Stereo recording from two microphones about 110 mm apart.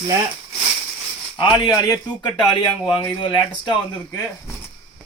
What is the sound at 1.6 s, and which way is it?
Speech, 40° left (ahead or behind).